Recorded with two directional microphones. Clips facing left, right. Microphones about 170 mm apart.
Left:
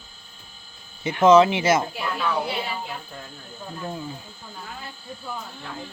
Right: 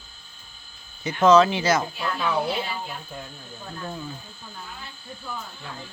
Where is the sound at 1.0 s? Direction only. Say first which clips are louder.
Left 2 dB; 25° left (ahead or behind).